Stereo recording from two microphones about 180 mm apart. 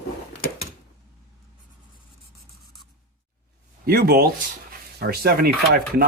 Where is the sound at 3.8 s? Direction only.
55° right (ahead or behind).